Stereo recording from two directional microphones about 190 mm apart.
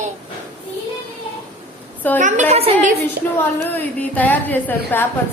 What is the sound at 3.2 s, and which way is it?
Speech, 55° right (ahead or behind).